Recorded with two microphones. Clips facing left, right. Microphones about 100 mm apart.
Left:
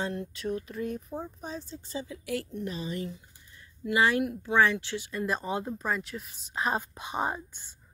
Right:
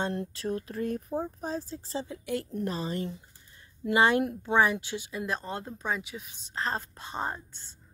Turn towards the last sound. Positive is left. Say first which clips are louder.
# left 3 dB
turn(degrees=10)  # may be behind; listen again after turning